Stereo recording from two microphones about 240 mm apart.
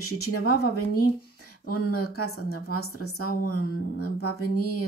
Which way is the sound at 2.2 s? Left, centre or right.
Left.